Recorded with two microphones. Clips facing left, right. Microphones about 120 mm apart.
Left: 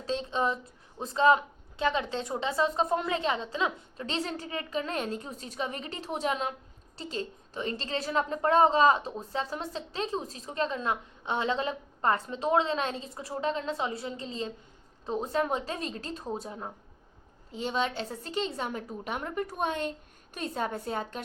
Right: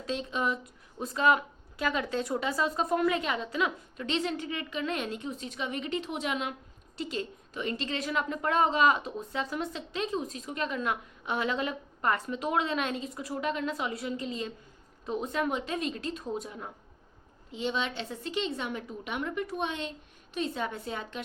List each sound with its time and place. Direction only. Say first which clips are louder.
0.0 s a woman's voice: left 2 dB; 30° left (ahead or behind)